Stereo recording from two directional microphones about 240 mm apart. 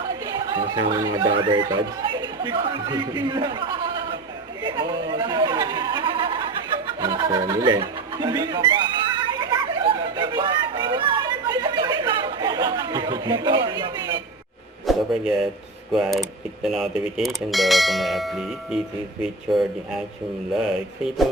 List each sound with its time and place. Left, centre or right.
0.3 s speech: centre
4.6 s a sound: centre
14.8 s a man's voice: centre
15.9 s bell: centre